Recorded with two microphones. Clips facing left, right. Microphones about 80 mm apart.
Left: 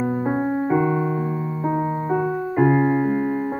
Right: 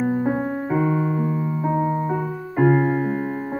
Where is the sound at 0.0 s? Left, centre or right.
Centre.